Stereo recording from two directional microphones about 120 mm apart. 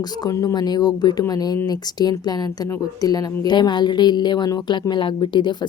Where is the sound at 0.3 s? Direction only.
30° left (ahead or behind).